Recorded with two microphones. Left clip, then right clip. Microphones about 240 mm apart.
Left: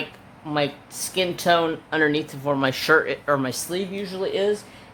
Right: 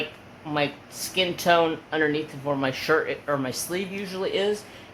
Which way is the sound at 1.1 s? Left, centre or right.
Centre.